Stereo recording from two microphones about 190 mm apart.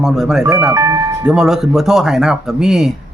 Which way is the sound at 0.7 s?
15° right (ahead or behind).